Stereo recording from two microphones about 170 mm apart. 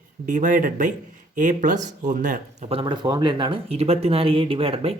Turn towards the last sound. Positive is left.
turn(degrees=-35)  # may be behind; listen again after turning